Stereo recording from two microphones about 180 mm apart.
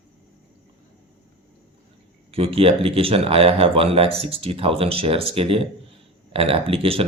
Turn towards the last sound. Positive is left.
turn(degrees=-30)  # may be behind; listen again after turning